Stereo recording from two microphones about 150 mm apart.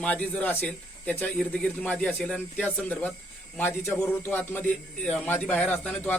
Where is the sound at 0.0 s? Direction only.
10° left (ahead or behind).